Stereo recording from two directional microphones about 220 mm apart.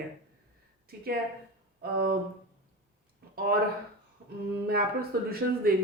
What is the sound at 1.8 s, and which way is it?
Speech, 45° right (ahead or behind).